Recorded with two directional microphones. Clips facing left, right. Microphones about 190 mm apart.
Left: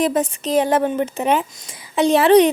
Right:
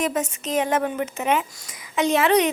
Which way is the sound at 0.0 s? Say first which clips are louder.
Left 6 dB; 35° left (ahead or behind).